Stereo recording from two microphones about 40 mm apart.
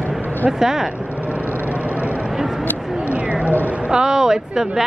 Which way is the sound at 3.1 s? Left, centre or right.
Right.